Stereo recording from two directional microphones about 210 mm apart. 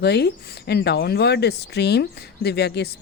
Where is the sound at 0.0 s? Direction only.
50° left (ahead or behind).